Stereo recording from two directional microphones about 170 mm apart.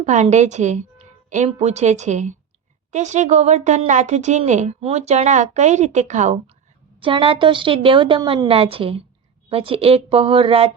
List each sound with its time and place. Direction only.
0.0 s speech: 45° right (ahead or behind)
7.0 s a woman's voice: 30° right (ahead or behind)